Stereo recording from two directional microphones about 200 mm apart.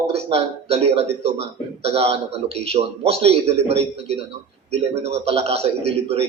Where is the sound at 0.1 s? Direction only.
30° right (ahead or behind).